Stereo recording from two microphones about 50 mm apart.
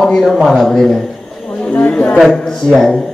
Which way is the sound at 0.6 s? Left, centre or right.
Centre.